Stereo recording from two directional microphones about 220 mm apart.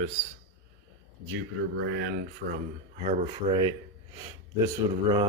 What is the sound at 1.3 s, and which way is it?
Speech, 60° right (ahead or behind).